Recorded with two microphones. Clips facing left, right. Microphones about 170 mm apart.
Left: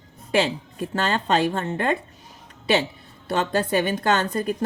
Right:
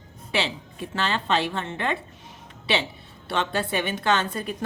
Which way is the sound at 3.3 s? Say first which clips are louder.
Left 4 dB; 40° left (ahead or behind).